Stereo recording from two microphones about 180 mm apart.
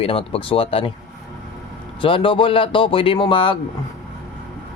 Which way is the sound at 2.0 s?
30° left (ahead or behind).